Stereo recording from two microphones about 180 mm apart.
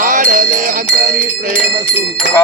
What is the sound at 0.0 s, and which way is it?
Music, 50° right (ahead or behind).